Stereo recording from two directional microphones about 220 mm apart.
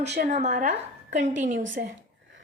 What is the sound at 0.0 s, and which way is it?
A woman's voice, 30° right (ahead or behind).